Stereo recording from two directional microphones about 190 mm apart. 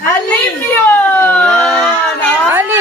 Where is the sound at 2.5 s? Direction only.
10° right (ahead or behind).